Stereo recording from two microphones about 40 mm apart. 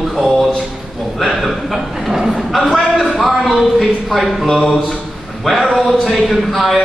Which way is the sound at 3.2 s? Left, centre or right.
Centre.